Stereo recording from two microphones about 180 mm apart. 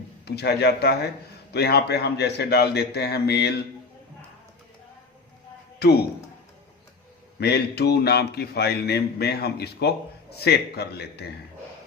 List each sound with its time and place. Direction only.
0.3 s speech: 65° left (ahead or behind)
5.8 s speech: 60° left (ahead or behind)
7.3 s speech: 65° left (ahead or behind)